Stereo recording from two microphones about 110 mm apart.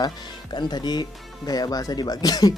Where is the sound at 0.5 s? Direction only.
40° left (ahead or behind).